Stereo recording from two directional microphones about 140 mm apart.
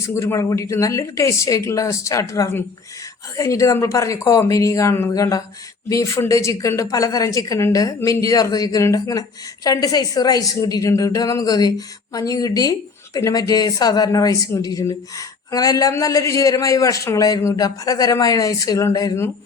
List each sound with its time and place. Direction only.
0.0 s a man's voice: 20° left (ahead or behind)